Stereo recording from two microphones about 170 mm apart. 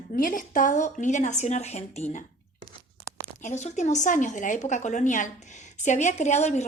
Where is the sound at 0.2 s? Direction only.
50° left (ahead or behind).